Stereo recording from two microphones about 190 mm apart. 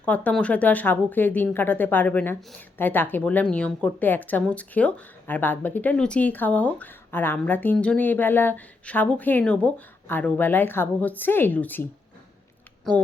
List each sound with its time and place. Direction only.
0.0 s a woman's voice: 10° left (ahead or behind)